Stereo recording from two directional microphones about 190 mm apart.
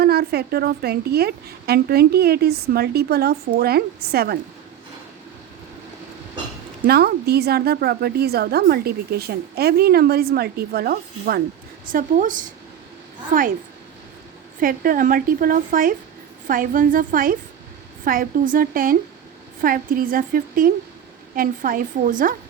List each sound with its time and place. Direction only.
0.0 s a woman's voice: 55° right (ahead or behind)
6.8 s a woman's voice: 55° right (ahead or behind)
14.6 s a woman's voice: 45° right (ahead or behind)